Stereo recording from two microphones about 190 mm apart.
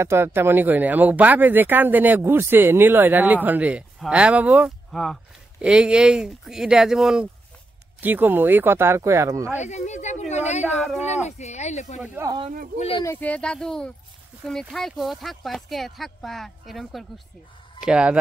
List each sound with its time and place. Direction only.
0.0 s speech: 15° right (ahead or behind)
9.6 s speech: 35° left (ahead or behind)
12.0 s speech: 15° right (ahead or behind)
12.7 s speech: 30° left (ahead or behind)
13.0 s speech: 10° left (ahead or behind); by 18.1 s 5° right (ahead or behind)